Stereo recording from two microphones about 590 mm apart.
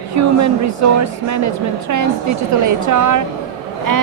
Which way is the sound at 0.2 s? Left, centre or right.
Right.